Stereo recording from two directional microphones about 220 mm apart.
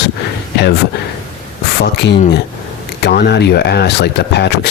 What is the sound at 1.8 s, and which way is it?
Speech, 50° left (ahead or behind).